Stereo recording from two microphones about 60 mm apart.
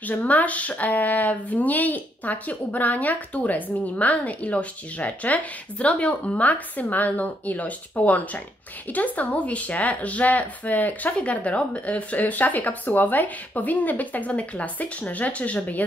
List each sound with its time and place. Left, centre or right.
0.0 s speech: left